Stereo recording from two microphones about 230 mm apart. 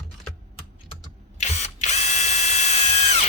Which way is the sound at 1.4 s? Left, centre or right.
Left.